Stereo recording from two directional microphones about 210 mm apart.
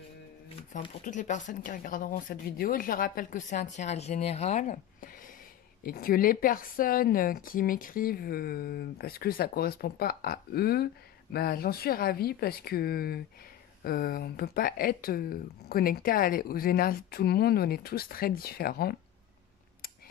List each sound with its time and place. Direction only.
0.7 s speech: 35° left (ahead or behind)